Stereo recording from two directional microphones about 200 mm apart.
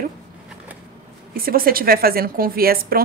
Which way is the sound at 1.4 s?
45° right (ahead or behind).